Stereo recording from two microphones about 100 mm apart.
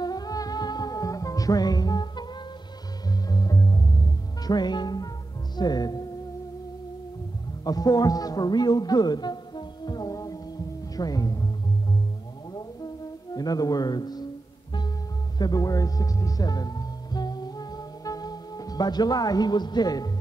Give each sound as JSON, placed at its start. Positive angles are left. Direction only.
{"t": 0.0, "sound": "music", "side_deg": 40}
{"t": 3.3, "sound": "music", "side_deg": 35}
{"t": 5.6, "sound": "speech", "side_deg": 40}
{"t": 7.6, "sound": "music", "side_deg": 40}
{"t": 11.0, "sound": "speech", "side_deg": 35}
{"t": 12.5, "sound": "music", "side_deg": 40}
{"t": 15.3, "sound": "music", "side_deg": 40}